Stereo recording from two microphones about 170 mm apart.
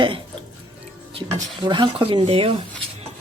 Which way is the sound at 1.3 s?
25° right (ahead or behind).